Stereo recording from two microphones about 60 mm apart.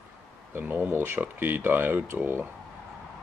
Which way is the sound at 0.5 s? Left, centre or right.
Right.